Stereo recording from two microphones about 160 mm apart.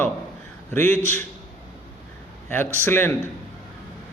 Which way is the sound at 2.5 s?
15° left (ahead or behind).